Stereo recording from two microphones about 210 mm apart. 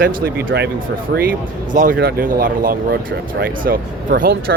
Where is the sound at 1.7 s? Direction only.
40° right (ahead or behind).